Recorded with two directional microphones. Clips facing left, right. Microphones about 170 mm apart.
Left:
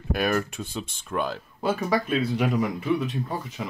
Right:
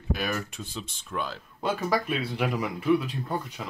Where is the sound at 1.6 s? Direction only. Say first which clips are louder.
Left 2 dB; centre (ahead or behind).